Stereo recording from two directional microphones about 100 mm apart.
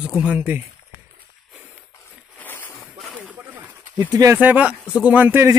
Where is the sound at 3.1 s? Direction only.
10° right (ahead or behind).